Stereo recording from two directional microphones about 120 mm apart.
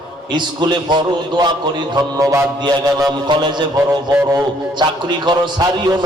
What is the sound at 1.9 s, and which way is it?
Music, 30° right (ahead or behind).